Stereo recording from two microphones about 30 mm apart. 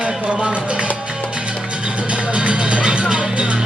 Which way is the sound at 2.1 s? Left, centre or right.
Right.